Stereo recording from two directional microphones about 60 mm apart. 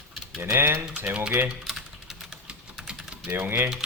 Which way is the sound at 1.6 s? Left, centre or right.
Centre.